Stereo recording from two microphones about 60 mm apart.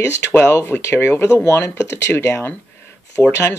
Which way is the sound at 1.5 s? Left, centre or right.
Left.